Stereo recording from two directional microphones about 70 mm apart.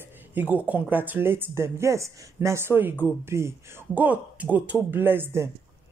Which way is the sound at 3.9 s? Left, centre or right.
Right.